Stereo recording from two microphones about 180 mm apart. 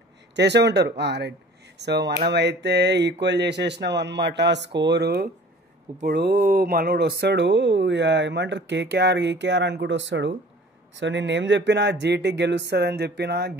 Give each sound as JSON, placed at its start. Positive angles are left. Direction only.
{"t": 0.4, "sound": "speech", "side_deg": -70}